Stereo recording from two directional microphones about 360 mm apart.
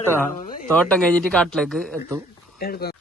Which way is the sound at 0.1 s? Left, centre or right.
Centre.